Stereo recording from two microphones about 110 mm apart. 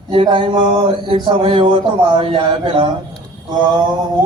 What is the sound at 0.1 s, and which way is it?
Speech, 50° right (ahead or behind).